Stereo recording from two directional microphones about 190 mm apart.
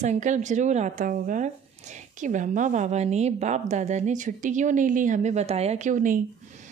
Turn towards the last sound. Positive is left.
turn(degrees=-45)  # may be behind; listen again after turning